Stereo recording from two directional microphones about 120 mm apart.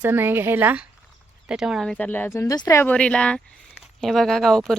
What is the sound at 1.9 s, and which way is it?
Speech, 10° left (ahead or behind).